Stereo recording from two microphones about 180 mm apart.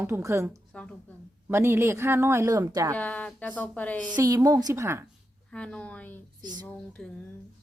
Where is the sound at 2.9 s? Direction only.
10° left (ahead or behind).